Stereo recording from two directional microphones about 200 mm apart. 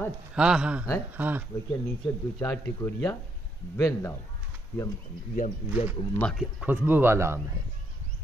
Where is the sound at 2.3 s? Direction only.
10° left (ahead or behind).